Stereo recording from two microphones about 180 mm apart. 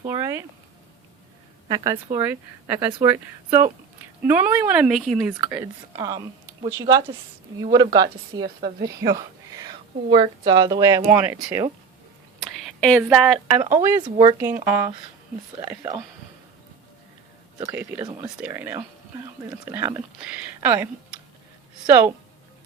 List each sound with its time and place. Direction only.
0.1 s a sound: 15° right (ahead or behind)
1.6 s a woman's voice: 20° right (ahead or behind)
2.1 s speech: 10° right (ahead or behind)
5.3 s a woman's voice: 10° right (ahead or behind)
12.6 s speech: centre (ahead or behind)
13.6 s speech: 15° right (ahead or behind)
17.6 s speech: 10° right (ahead or behind)